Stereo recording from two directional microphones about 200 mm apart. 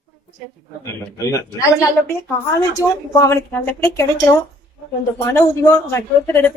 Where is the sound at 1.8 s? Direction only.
10° left (ahead or behind).